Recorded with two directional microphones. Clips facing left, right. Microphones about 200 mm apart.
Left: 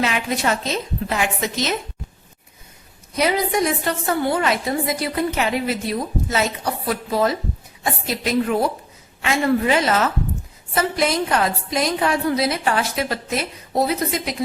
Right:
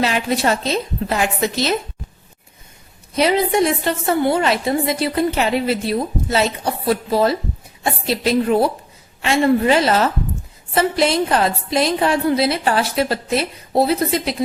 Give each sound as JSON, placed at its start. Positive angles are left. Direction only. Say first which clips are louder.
{"t": 0.0, "sound": "a woman's voice", "louder": "right 3 dB", "side_deg": -35}
{"t": 3.2, "sound": "a woman's voice", "louder": "right 4 dB", "side_deg": -25}